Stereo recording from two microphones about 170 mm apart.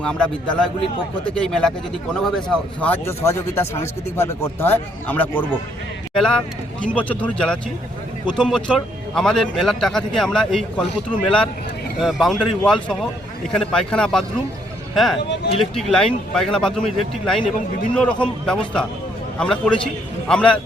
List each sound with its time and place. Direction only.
0.0 s a man's voice: 5° left (ahead or behind)
11.9 s a man's voice: centre (ahead or behind)